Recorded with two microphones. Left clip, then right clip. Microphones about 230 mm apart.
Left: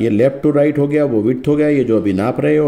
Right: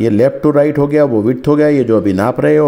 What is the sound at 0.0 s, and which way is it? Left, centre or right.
Speech, centre.